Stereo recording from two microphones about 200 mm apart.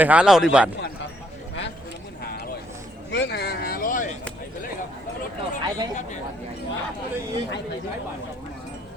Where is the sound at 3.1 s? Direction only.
55° left (ahead or behind).